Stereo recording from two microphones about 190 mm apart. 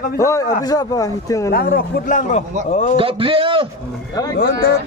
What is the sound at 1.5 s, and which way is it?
A man's voice, 50° left (ahead or behind).